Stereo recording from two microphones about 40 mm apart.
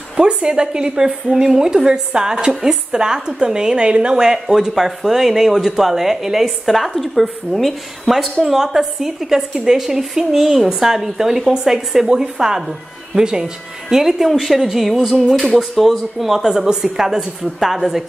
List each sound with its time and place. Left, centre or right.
0.2 s a woman's voice: right
4.3 s a woman's voice: centre
16.4 s a woman's voice: centre